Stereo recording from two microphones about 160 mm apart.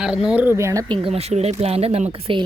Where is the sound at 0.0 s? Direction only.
5° right (ahead or behind); by 0.9 s 20° right (ahead or behind).